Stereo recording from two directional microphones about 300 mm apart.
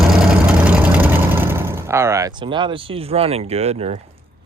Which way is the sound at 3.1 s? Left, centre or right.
Centre.